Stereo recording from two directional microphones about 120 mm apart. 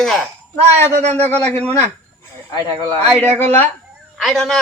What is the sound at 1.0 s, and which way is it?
Speech, 70° right (ahead or behind).